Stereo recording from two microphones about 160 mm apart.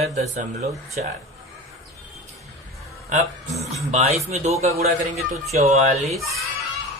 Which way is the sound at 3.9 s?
45° right (ahead or behind).